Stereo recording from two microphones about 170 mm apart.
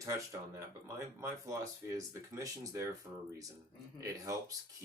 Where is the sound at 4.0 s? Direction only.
20° right (ahead or behind).